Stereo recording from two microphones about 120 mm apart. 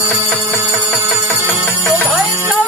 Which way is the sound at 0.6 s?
15° right (ahead or behind).